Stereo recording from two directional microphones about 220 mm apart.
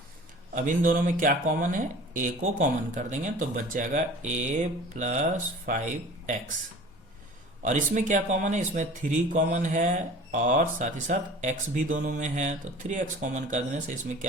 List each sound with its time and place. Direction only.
0.5 s speech: 35° right (ahead or behind)
7.6 s speech: 35° right (ahead or behind)